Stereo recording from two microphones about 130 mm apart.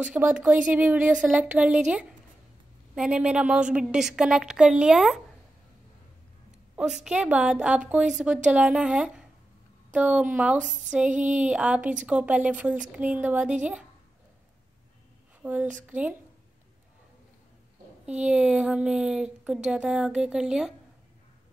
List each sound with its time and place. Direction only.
0.0 s a woman's voice: 10° right (ahead or behind)
6.8 s a woman's voice: 5° right (ahead or behind)
15.7 s a woman's voice: 10° right (ahead or behind)
18.0 s a woman's voice: 10° right (ahead or behind)